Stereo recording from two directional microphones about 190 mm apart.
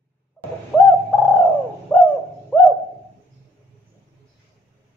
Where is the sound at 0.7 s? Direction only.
Centre (ahead or behind).